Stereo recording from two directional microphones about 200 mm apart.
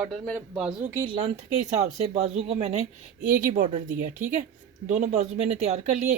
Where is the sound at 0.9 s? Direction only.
25° right (ahead or behind).